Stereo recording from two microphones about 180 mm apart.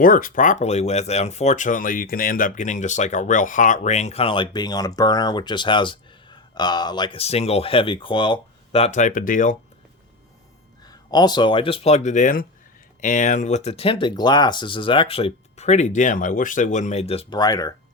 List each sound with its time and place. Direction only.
0.0 s speech: 50° left (ahead or behind)
10.8 s speech: 20° left (ahead or behind)